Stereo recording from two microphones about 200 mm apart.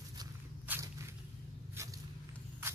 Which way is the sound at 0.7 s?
15° right (ahead or behind).